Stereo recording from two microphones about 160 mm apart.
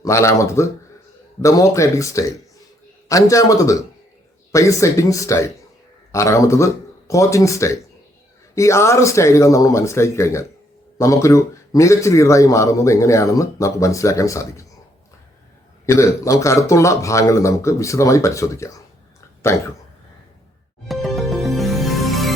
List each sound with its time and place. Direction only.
0.0 s a man's voice: 20° left (ahead or behind)
15.9 s a man's voice: 20° left (ahead or behind)
19.4 s throat clearing: 15° left (ahead or behind)
20.8 s music: centre (ahead or behind)